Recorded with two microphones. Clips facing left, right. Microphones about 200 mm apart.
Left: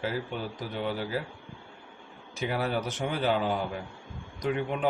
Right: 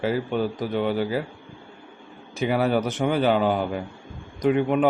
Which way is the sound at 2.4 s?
70° right (ahead or behind).